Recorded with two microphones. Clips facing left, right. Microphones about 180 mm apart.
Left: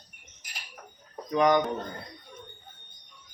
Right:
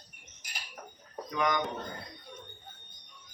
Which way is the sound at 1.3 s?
40° left (ahead or behind).